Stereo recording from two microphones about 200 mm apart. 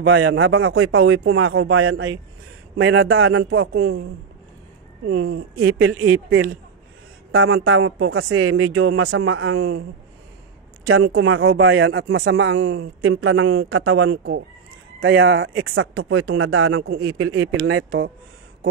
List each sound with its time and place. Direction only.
0.0 s speech: 85° right
5.0 s speech: 80° right
11.1 s speech: 90° right
15.0 s speech: 80° right